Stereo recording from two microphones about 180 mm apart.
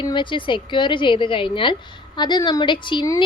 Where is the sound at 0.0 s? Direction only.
25° left (ahead or behind).